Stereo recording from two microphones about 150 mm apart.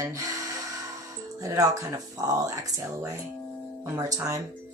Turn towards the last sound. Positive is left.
turn(degrees=-20)  # may be behind; listen again after turning